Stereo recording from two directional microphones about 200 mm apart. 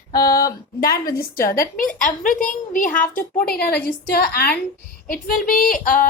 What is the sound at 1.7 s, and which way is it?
A woman's voice, 40° left (ahead or behind).